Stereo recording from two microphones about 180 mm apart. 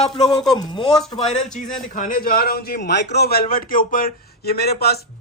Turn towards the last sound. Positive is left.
turn(degrees=60)  # may be behind; listen again after turning